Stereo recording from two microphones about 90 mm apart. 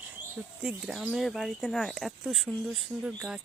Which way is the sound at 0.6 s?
10° right (ahead or behind).